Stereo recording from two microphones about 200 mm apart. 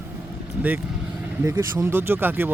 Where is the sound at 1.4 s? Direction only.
15° right (ahead or behind).